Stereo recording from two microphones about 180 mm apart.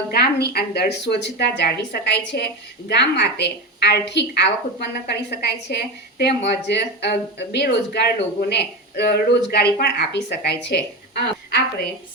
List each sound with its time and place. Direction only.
0.1 s a woman's voice: 60° left (ahead or behind)